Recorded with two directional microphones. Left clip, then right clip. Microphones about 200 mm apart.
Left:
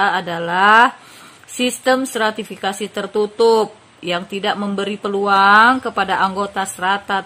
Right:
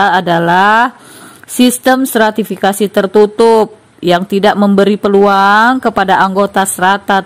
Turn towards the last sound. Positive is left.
turn(degrees=-40)  # may be behind; listen again after turning